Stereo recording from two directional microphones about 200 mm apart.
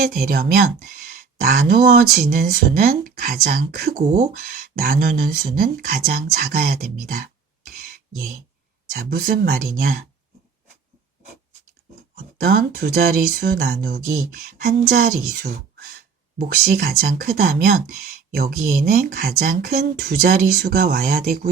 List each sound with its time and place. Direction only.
0.3 s speech: 50° right (ahead or behind)
9.0 s speech: 50° right (ahead or behind)
12.4 s speech: 45° right (ahead or behind)
14.6 s a woman's voice: 40° right (ahead or behind)